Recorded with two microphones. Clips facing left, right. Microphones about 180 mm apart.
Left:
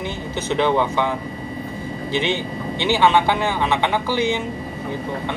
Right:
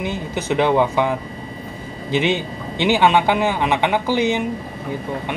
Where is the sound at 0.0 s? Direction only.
15° right (ahead or behind).